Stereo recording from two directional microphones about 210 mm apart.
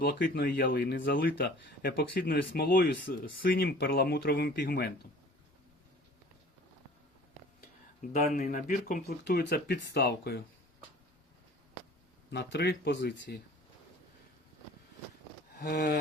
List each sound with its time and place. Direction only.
0.0 s speech: 45° left (ahead or behind)
8.0 s speech: 35° left (ahead or behind)
12.3 s speech: 50° left (ahead or behind)
15.5 s speech: 50° left (ahead or behind)